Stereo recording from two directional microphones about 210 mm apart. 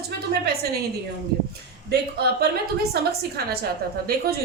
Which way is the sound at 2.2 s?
50° right (ahead or behind).